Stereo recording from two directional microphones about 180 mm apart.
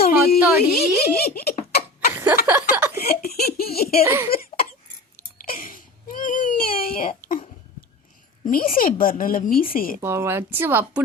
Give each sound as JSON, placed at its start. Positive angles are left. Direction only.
{"t": 0.0, "sound": "a sound", "side_deg": 55}
{"t": 2.1, "sound": "a sound", "side_deg": -10}
{"t": 2.5, "sound": "speech", "side_deg": -10}
{"t": 3.2, "sound": "giggle", "side_deg": 60}
{"t": 4.0, "sound": "speech", "side_deg": -10}
{"t": 4.3, "sound": "cough", "side_deg": 55}
{"t": 5.5, "sound": "a sound", "side_deg": 50}
{"t": 8.4, "sound": "a woman's voice", "side_deg": 50}
{"t": 10.0, "sound": "speech", "side_deg": -15}